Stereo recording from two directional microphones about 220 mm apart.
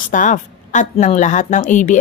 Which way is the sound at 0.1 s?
35° left (ahead or behind).